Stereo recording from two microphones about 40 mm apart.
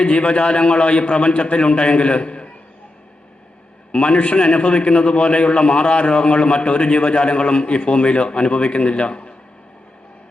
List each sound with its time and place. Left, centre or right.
0.0 s a man's voice: left
3.9 s a man's voice: left